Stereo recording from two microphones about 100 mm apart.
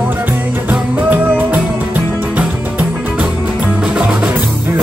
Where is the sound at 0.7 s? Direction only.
20° right (ahead or behind).